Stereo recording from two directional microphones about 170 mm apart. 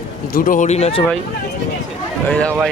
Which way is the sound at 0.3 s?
50° left (ahead or behind).